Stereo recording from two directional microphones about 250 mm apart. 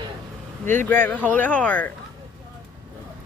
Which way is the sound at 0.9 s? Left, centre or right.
Centre.